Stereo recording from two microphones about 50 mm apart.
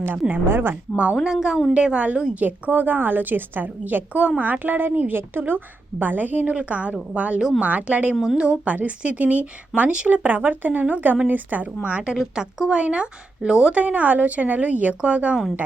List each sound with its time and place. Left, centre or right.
0.3 s a woman's voice: right
1.2 s a woman's voice: centre
1.7 s a woman's voice: right
8.1 s a woman's voice: centre
8.4 s a woman's voice: right
12.1 s a woman's voice: centre